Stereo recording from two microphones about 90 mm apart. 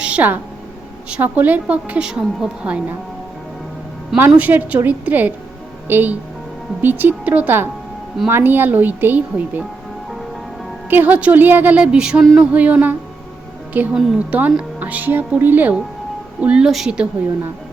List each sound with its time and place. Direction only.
0.0 s a sound: 15° right (ahead or behind)
1.1 s a woman's voice: 20° right (ahead or behind)
4.4 s speech: 20° right (ahead or behind)
10.8 s a woman's voice: 20° right (ahead or behind)
14.3 s a woman's voice: 20° right (ahead or behind)